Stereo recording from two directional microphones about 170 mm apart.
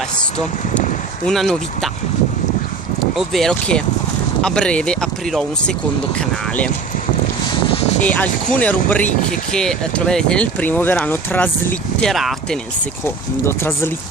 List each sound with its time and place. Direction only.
1.2 s speech: 5° left (ahead or behind)
3.0 s speech: centre (ahead or behind)
7.6 s a sound: 35° left (ahead or behind)
8.0 s speech: 10° left (ahead or behind)
13.0 s speech: 15° left (ahead or behind)